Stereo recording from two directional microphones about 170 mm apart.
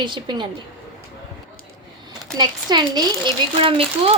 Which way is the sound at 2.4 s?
25° right (ahead or behind).